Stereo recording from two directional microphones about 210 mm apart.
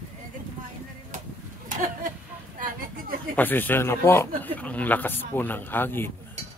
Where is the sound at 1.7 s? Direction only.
40° right (ahead or behind).